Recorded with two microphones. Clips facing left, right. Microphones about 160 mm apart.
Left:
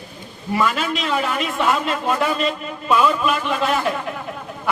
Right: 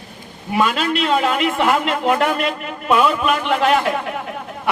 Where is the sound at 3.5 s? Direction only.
70° right (ahead or behind).